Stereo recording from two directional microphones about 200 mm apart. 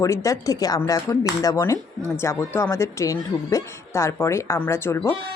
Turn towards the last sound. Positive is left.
turn(degrees=15)  # may be behind; listen again after turning